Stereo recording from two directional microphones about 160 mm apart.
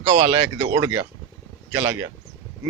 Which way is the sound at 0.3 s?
20° right (ahead or behind).